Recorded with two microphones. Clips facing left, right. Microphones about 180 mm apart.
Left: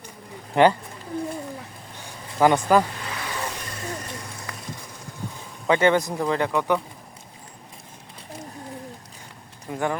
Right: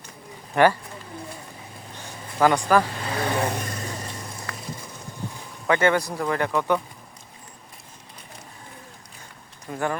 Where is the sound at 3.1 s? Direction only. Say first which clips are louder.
Right 9 dB; 55° right (ahead or behind).